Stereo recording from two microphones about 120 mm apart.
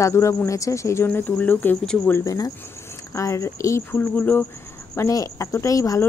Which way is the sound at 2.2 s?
30° left (ahead or behind).